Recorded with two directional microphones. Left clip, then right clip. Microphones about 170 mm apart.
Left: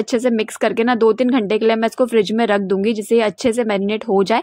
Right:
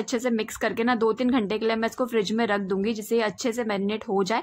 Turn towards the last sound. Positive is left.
turn(degrees=30)  # may be behind; listen again after turning